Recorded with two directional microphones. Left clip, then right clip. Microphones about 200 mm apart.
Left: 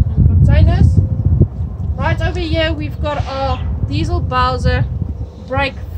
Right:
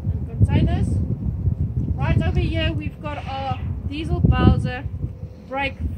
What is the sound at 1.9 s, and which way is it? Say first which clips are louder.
A woman's voice: left 8 dB; 35° left (ahead or behind).